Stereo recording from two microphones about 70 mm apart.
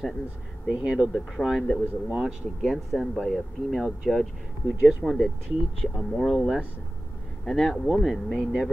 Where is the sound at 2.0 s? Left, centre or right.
Centre.